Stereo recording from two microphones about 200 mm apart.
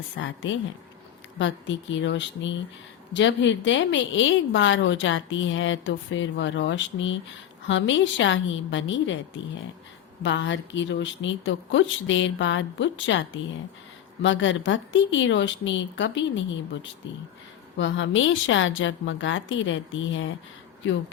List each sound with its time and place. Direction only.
0.2 s a woman's voice: 70° left (ahead or behind)
1.4 s a woman's voice: 65° left (ahead or behind)
17.7 s a woman's voice: 70° left (ahead or behind)